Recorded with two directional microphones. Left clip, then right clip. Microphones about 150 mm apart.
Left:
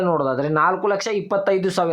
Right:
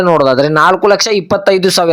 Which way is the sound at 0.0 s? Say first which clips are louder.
Right 11 dB; 40° right (ahead or behind).